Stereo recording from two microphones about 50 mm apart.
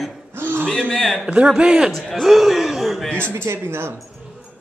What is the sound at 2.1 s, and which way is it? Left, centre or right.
A man's voice, centre.